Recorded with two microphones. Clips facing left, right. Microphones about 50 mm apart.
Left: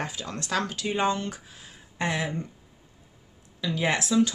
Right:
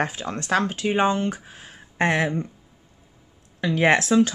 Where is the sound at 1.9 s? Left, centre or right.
Right.